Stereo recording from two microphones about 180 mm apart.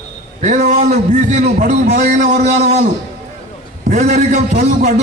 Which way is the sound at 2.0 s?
45° right (ahead or behind).